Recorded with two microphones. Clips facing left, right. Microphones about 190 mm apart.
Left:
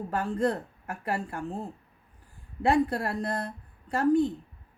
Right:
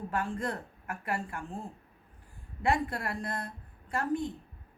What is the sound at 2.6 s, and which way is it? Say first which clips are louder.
Speech: left 6 dB; 35° left (ahead or behind).